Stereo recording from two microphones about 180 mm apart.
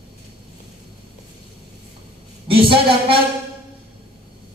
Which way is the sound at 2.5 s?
30° right (ahead or behind).